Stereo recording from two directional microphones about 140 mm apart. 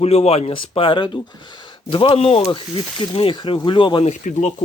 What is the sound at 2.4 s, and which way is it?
Speech, 35° left (ahead or behind).